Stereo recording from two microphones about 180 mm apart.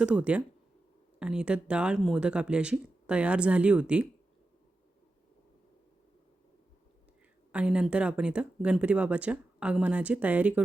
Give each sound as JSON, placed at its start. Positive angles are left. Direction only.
{"t": 0.0, "sound": "speech", "side_deg": -5}
{"t": 7.5, "sound": "speech", "side_deg": -5}